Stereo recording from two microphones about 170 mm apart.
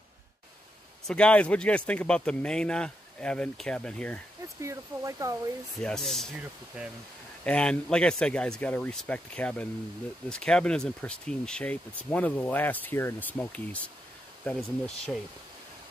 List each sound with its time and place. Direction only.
1.0 s speech: 5° left (ahead or behind)
4.6 s speech: 20° right (ahead or behind)
5.8 s speech: 5° left (ahead or behind)
7.4 s speech: 5° left (ahead or behind)